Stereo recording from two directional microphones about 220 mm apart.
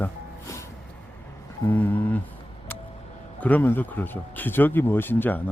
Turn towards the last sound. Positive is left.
turn(degrees=10)  # may be behind; listen again after turning